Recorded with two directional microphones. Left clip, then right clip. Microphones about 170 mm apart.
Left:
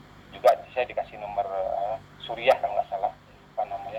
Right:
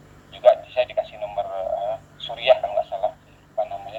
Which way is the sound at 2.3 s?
10° left (ahead or behind).